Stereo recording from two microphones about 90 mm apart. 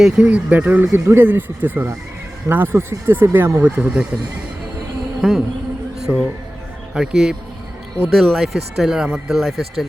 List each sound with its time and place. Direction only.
0.0 s speech: 10° right (ahead or behind)
3.8 s speech: 10° right (ahead or behind)
5.2 s speech: 5° right (ahead or behind)
6.1 s speech: 30° right (ahead or behind)
6.9 s speech: 5° right (ahead or behind)